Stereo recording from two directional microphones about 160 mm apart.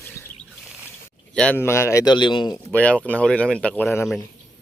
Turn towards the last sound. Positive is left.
turn(degrees=10)  # may be behind; listen again after turning